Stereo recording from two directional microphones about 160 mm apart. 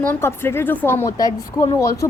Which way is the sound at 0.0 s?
15° left (ahead or behind).